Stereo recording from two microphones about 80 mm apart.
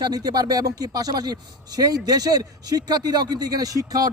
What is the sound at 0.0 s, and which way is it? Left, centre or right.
A man's voice, right.